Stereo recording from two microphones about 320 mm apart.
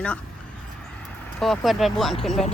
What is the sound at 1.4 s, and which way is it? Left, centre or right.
Speech, centre.